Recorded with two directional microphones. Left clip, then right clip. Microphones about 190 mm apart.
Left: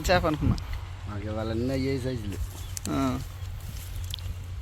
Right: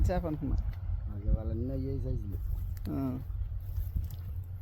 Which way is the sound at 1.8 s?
30° left (ahead or behind).